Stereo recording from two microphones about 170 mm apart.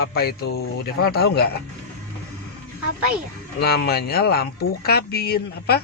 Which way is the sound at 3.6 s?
70° left (ahead or behind).